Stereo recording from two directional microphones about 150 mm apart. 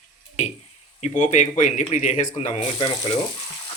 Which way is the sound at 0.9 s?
50° left (ahead or behind).